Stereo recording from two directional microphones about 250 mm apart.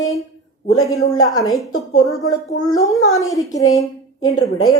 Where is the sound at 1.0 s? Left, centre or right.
Left.